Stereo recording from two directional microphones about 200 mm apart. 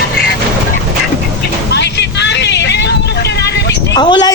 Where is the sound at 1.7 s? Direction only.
60° left (ahead or behind).